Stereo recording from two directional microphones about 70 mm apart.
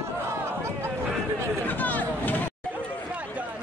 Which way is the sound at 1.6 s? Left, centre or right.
Left.